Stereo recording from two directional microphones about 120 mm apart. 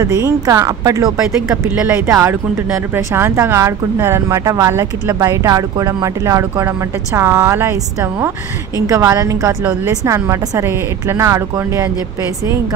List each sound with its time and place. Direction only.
0.0 s speech: 30° right (ahead or behind)
1.7 s speech: 15° right (ahead or behind)
2.0 s speech: 25° right (ahead or behind)